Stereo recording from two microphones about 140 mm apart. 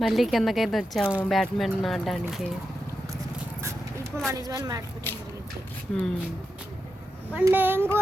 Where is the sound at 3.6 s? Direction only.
20° right (ahead or behind).